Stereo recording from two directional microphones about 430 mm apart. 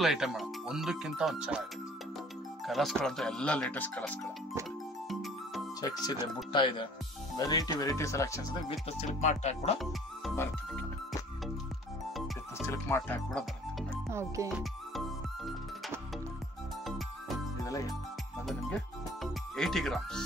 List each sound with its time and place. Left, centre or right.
0.0 s speech: centre
2.6 s speech: centre
5.2 s music: centre
6.5 s speech: centre
9.8 s music: centre
12.5 s speech: centre
14.1 s music: centre
19.5 s speech: centre